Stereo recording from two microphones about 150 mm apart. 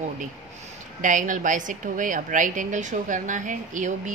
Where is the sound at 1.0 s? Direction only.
60° right (ahead or behind).